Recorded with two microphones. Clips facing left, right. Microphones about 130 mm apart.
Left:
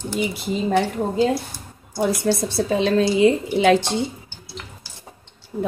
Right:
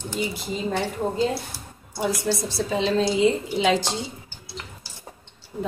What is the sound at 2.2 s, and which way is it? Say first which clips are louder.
A woman's voice: left 5 dB; 55° left (ahead or behind).